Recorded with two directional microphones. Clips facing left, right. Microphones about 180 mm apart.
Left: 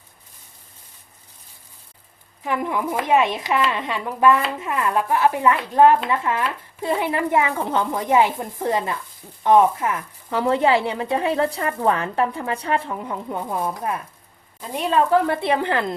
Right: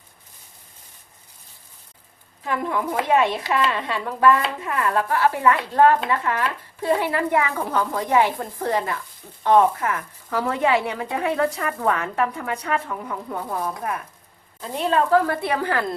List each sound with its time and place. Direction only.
2.4 s speech: 15° left (ahead or behind)